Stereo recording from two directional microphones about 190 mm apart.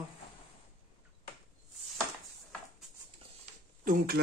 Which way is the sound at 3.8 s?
50° right (ahead or behind).